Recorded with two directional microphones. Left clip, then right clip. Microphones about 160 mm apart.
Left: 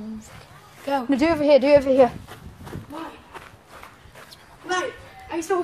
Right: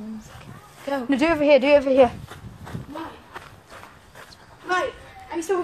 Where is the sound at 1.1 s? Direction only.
5° right (ahead or behind); by 2.1 s 15° left (ahead or behind).